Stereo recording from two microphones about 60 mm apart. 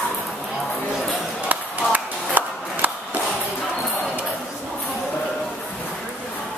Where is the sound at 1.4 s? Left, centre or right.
Right.